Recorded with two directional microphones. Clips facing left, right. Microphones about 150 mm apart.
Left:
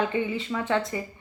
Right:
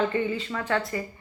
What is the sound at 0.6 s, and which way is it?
Speech, 20° left (ahead or behind).